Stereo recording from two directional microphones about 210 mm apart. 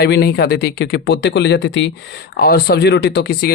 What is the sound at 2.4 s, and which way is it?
Speech, 45° left (ahead or behind).